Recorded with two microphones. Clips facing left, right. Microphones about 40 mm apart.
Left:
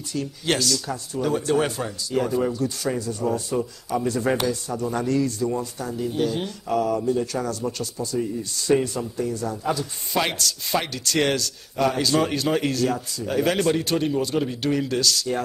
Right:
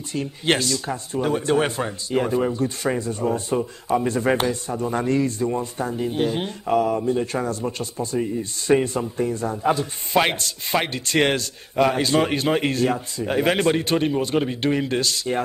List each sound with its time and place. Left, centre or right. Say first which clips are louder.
0.1 s a man's voice: right 3 dB; right